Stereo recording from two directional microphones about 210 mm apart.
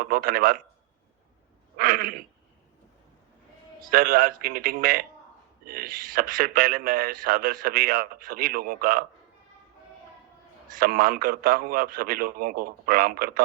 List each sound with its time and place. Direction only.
0.0 s speech: 45° right (ahead or behind)
1.7 s a sound: 45° right (ahead or behind)
3.9 s speech: 40° right (ahead or behind)
10.8 s speech: 45° right (ahead or behind)